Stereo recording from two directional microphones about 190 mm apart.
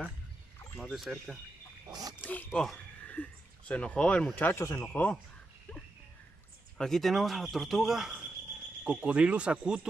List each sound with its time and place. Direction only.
0.6 s a sound: 10° left (ahead or behind)
0.9 s speech: centre (ahead or behind)
1.9 s speech: 20° right (ahead or behind)
2.2 s speech: 5° left (ahead or behind)
6.8 s speech: centre (ahead or behind)